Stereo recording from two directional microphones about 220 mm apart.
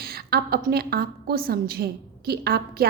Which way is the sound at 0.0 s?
45° right (ahead or behind).